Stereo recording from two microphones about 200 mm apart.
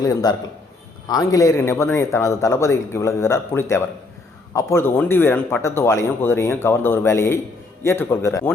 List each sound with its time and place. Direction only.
0.0 s a man's voice: 20° left (ahead or behind)